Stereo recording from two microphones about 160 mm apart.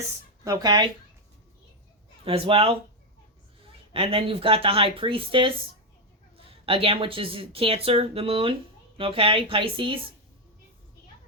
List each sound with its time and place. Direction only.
0.4 s speech: 20° right (ahead or behind)
2.2 s a woman's voice: 35° right (ahead or behind)
3.9 s a woman's voice: 35° right (ahead or behind)